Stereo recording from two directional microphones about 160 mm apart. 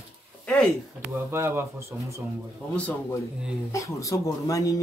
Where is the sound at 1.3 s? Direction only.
15° right (ahead or behind).